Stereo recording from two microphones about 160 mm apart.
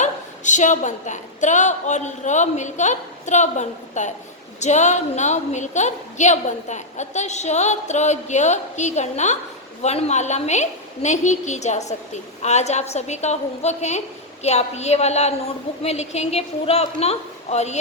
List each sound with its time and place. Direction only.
0.0 s a woman's voice: 50° left (ahead or behind)